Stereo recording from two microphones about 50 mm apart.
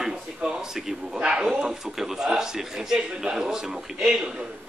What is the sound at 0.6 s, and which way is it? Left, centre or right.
Speech, centre.